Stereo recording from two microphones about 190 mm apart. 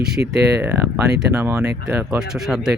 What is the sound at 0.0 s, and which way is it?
Speech, 60° right (ahead or behind).